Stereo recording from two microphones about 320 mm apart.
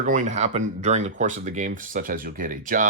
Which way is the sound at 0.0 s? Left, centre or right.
Right.